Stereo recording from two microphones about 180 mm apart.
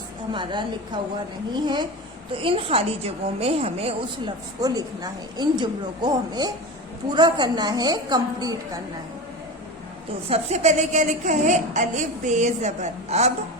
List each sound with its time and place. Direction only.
0.3 s a woman's voice: 25° right (ahead or behind)
4.6 s speech: 20° right (ahead or behind)
10.2 s a woman's voice: 35° right (ahead or behind)